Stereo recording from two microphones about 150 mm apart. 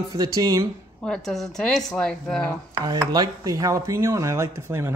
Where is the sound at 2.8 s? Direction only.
25° right (ahead or behind).